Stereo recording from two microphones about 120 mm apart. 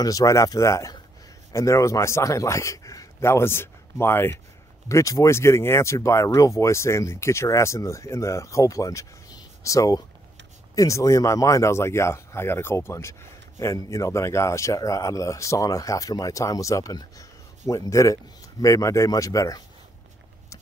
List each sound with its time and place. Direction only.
0.0 s a man's voice: 30° left (ahead or behind)